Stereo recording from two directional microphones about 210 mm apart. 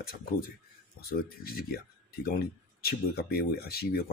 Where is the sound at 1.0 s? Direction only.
45° left (ahead or behind).